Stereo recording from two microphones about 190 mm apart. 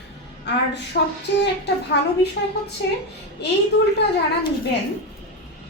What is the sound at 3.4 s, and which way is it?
Speech, 65° left (ahead or behind).